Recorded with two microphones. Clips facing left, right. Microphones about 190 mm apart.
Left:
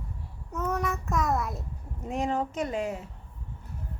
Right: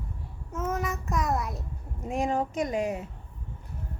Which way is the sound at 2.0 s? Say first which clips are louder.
Right 1 dB; 10° right (ahead or behind).